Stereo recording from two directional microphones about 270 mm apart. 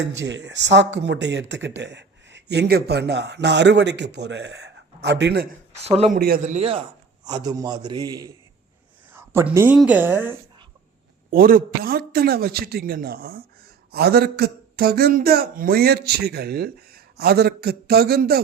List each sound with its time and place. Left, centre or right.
0.3 s a man's voice: right
5.8 s a man's voice: right
6.1 s a man's voice: right; by 10.7 s centre
11.3 s a man's voice: right